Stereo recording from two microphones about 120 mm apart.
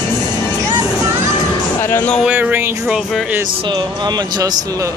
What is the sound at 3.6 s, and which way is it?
Speech, 40° right (ahead or behind).